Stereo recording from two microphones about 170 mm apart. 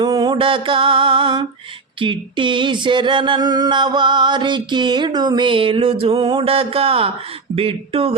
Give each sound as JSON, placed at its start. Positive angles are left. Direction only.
{"t": 0.0, "sound": "mantra", "side_deg": -25}
{"t": 2.0, "sound": "a sound", "side_deg": -30}
{"t": 7.5, "sound": "mantra", "side_deg": -35}